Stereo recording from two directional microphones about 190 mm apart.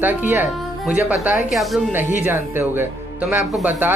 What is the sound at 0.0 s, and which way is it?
Speech, 10° right (ahead or behind).